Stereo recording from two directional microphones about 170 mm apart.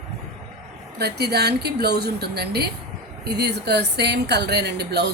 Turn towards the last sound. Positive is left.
turn(degrees=-75)  # may be behind; listen again after turning